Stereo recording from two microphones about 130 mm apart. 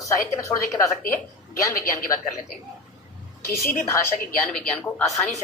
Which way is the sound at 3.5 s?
20° left (ahead or behind).